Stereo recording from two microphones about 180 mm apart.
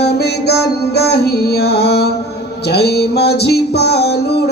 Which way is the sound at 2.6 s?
65° left (ahead or behind).